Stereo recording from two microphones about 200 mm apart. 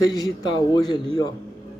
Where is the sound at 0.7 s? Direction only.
20° left (ahead or behind).